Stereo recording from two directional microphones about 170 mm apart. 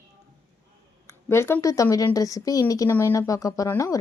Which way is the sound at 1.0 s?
15° left (ahead or behind).